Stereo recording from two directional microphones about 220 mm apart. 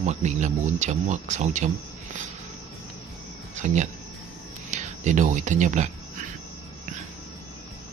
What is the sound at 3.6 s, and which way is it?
Speech, 35° right (ahead or behind).